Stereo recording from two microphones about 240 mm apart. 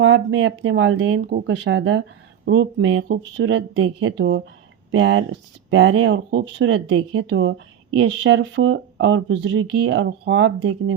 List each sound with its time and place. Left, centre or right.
0.0 s speech: right